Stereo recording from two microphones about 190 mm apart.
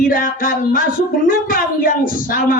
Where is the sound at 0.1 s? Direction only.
45° left (ahead or behind).